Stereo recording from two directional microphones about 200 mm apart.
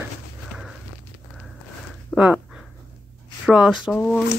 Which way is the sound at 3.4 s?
5° right (ahead or behind).